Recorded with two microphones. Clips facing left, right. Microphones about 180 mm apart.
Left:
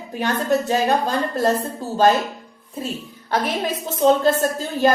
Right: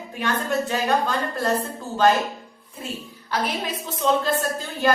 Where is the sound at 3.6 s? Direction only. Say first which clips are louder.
Left 7 dB; 45° left (ahead or behind).